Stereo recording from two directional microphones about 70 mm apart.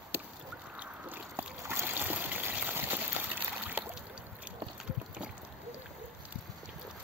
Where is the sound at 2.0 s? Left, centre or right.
Right.